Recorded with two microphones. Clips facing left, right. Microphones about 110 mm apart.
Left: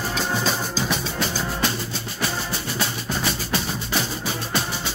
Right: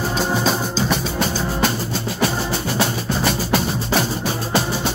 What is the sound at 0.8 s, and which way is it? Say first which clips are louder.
Music: right 5 dB; 55° right (ahead or behind).